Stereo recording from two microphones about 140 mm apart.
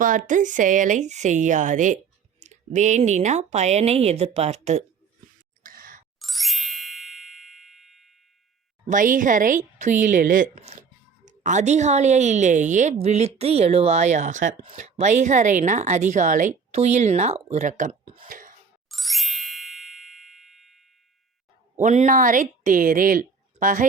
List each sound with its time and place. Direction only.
0.0 s a woman's voice: 70° right (ahead or behind); by 4.8 s 50° right (ahead or behind)
5.6 s a sound: 85° right
6.1 s ding: centre (ahead or behind)
8.9 s a woman's voice: 70° right (ahead or behind)
11.3 s a woman's voice: 60° right (ahead or behind)
16.7 s a woman's voice: 50° right (ahead or behind)
18.0 s a sound: 40° right (ahead or behind)
18.3 s throat clearing: 75° right (ahead or behind)
18.9 s ding: centre (ahead or behind)
21.8 s a woman's voice: 60° right (ahead or behind)